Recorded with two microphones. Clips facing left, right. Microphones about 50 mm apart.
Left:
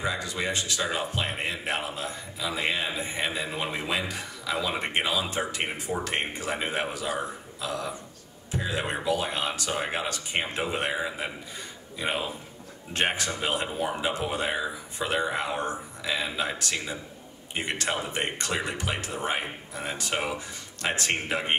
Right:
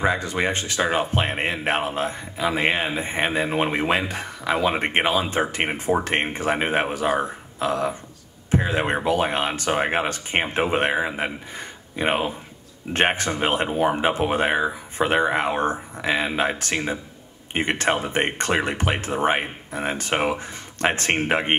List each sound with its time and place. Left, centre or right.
0.0 s speech: right